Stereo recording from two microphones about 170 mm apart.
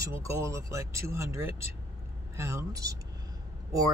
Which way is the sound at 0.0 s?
15° right (ahead or behind).